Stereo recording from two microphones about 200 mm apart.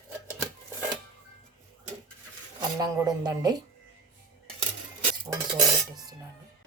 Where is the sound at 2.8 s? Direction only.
20° right (ahead or behind).